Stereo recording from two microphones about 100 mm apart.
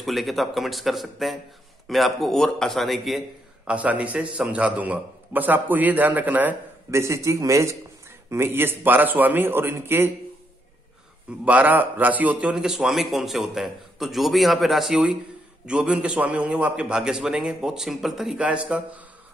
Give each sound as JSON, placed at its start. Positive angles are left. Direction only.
{"t": 0.0, "sound": "a man's voice", "side_deg": 0}
{"t": 3.6, "sound": "a man's voice", "side_deg": -15}
{"t": 6.9, "sound": "a man's voice", "side_deg": -30}
{"t": 11.4, "sound": "a man's voice", "side_deg": -15}